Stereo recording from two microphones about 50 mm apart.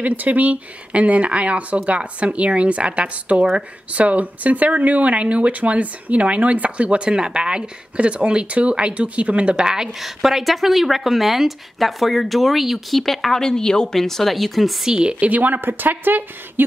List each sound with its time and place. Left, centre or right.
0.0 s speech: right; by 14.9 s centre
14.9 s speech: centre
15.1 s a woman's voice: right